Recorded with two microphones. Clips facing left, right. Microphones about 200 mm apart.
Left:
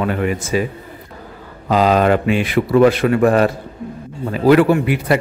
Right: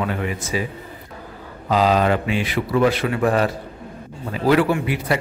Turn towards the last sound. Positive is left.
turn(degrees=55)  # may be behind; listen again after turning